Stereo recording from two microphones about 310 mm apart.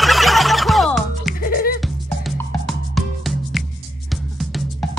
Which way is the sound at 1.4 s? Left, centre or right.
Left.